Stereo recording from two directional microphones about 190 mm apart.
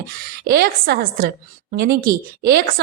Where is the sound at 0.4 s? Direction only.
55° right (ahead or behind).